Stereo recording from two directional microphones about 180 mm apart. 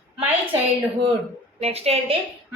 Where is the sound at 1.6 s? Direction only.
35° right (ahead or behind).